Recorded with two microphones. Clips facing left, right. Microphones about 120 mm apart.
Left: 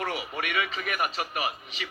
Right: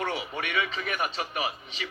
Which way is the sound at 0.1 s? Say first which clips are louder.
Even; 30° right (ahead or behind).